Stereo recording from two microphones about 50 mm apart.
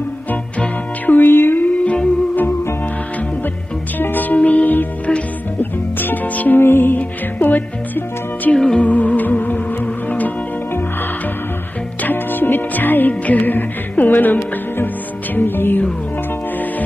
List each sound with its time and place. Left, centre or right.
0.3 s music: left
4.0 s music: left
6.6 s music: left
7.0 s music: left
8.5 s music: centre
8.8 s music: left
12.0 s music: left